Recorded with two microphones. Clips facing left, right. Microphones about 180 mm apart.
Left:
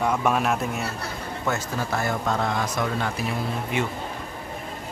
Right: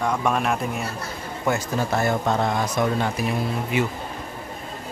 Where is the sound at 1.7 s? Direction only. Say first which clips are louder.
Right 4 dB; 25° right (ahead or behind).